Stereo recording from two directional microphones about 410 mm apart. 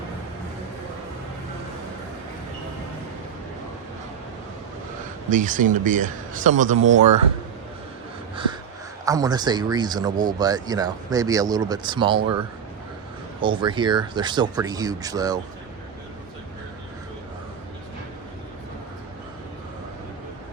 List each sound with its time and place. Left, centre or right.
5.3 s speech: centre
9.0 s speech: centre
13.4 s speech: centre